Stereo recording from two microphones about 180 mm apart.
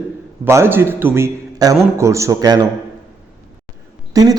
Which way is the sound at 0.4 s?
15° right (ahead or behind).